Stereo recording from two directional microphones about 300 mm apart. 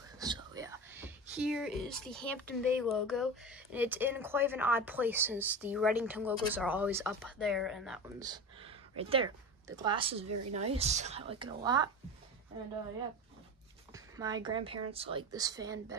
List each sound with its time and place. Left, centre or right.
0.2 s speech: centre
8.2 s a woman's voice: centre
13.9 s a woman's voice: centre